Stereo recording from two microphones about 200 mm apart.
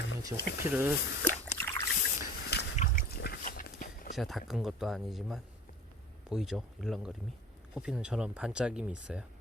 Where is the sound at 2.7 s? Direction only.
40° left (ahead or behind).